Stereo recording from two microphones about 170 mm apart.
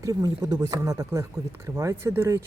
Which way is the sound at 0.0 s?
20° right (ahead or behind).